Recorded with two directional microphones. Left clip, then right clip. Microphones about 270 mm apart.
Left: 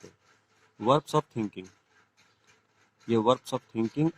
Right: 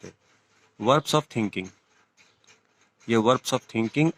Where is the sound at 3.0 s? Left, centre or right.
Right.